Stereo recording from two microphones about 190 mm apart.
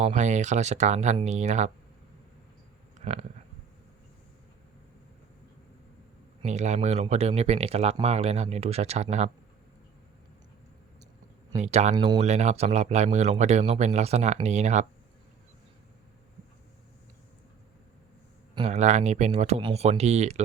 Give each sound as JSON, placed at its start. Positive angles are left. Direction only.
{"t": 0.0, "sound": "speech", "side_deg": -40}
{"t": 3.0, "sound": "a sound", "side_deg": -30}
{"t": 6.4, "sound": "speech", "side_deg": -35}
{"t": 11.6, "sound": "speech", "side_deg": -35}
{"t": 11.9, "sound": "speech", "side_deg": -25}
{"t": 12.3, "sound": "speech", "side_deg": -35}
{"t": 18.5, "sound": "speech", "side_deg": -35}